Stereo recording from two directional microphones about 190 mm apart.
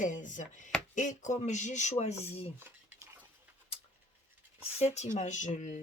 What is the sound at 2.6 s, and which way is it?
Cutlery, 10° right (ahead or behind).